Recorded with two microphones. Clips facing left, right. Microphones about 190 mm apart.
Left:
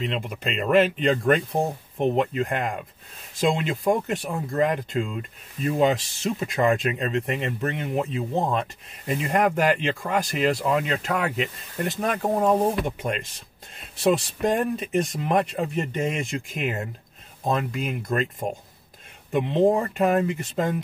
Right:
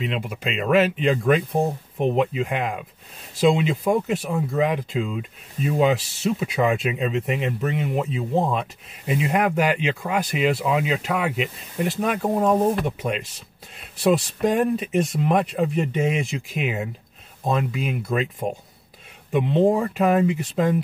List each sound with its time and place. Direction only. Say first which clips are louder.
0.0 s speech: right 1 dB; 5° right (ahead or behind)
9.4 s speech: left 2 dB; 45° left (ahead or behind)
9.8 s speech: right 1 dB; 5° right (ahead or behind)